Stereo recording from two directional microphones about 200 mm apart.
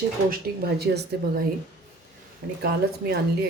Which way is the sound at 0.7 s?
55° right (ahead or behind).